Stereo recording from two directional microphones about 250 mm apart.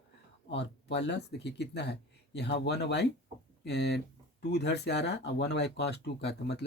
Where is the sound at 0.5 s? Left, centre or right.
Left.